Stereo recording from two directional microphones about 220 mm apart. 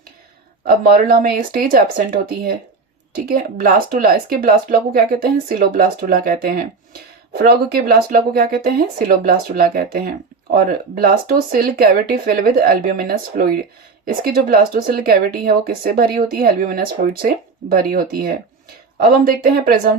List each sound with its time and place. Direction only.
0.7 s speech: 40° right (ahead or behind)